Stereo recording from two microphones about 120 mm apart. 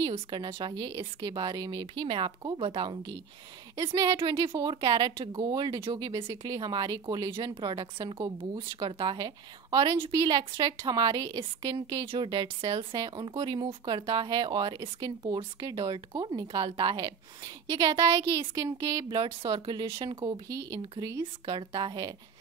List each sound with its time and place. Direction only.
0.0 s speech: 40° right (ahead or behind)
18.6 s speech: 30° right (ahead or behind)
20.4 s speech: 30° right (ahead or behind)
21.2 s speech: 40° right (ahead or behind)